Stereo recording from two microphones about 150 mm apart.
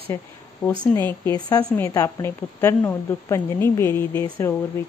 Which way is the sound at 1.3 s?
25° left (ahead or behind).